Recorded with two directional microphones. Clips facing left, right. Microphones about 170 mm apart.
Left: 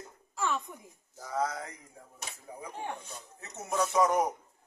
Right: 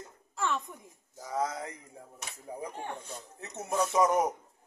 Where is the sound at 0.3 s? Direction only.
Centre (ahead or behind).